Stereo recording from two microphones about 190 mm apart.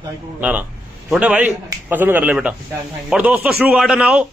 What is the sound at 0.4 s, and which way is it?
A man's voice, 10° right (ahead or behind).